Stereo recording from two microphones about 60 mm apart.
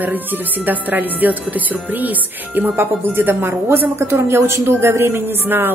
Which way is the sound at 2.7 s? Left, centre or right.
Right.